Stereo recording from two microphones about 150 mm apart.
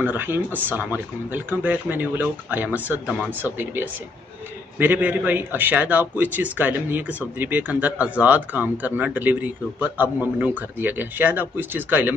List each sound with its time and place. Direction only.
0.0 s a man's voice: 15° right (ahead or behind)